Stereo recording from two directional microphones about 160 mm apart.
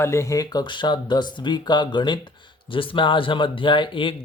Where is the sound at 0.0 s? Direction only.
15° left (ahead or behind).